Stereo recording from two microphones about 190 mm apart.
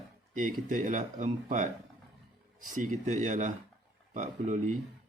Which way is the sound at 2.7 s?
40° right (ahead or behind).